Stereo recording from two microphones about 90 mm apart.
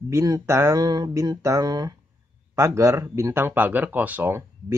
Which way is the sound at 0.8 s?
45° right (ahead or behind).